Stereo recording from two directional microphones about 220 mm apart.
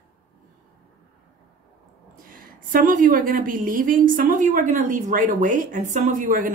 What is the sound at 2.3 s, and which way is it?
A woman's voice, 40° right (ahead or behind).